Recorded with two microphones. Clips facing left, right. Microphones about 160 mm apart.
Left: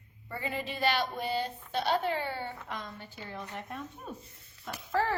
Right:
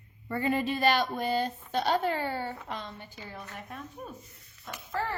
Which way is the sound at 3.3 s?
Centre (ahead or behind).